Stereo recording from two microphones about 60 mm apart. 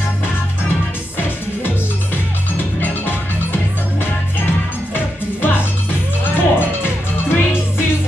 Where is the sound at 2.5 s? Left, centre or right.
Left.